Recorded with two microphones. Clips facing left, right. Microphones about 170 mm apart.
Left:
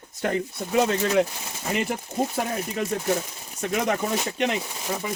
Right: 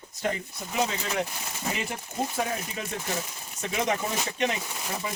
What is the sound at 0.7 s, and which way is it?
Speech, 60° left (ahead or behind).